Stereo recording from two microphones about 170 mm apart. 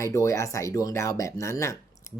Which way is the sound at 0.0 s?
15° left (ahead or behind).